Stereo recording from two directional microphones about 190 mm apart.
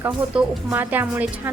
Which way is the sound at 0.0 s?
10° right (ahead or behind).